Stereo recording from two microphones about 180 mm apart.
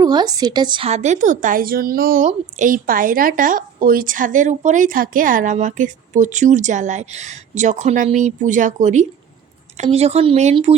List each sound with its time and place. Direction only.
0.0 s a woman's voice: 25° right (ahead or behind)
0.9 s a woman's voice: 40° right (ahead or behind)